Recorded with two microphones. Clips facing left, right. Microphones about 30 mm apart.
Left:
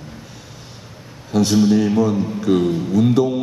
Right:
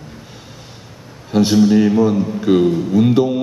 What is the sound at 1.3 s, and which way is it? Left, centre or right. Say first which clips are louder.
Speech: right 3 dB; right.